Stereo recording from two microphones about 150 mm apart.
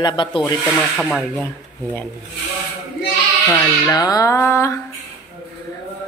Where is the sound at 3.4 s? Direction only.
20° left (ahead or behind).